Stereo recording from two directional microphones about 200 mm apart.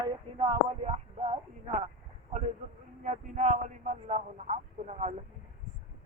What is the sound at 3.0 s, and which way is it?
Speech, 40° right (ahead or behind).